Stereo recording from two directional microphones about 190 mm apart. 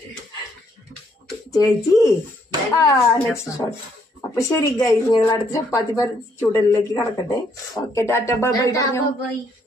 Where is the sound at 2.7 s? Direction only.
15° left (ahead or behind).